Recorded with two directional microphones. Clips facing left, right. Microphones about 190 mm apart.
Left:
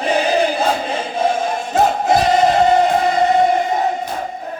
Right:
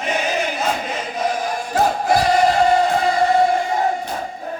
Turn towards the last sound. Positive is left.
turn(degrees=20)  # may be behind; listen again after turning